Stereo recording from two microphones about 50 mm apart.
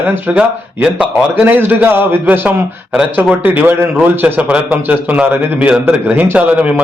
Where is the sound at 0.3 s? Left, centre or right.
Right.